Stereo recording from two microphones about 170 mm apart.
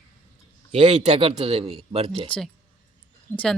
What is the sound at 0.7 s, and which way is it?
Speech, 40° right (ahead or behind).